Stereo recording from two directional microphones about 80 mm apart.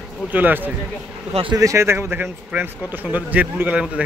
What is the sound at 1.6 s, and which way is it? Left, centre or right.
A man's voice, right.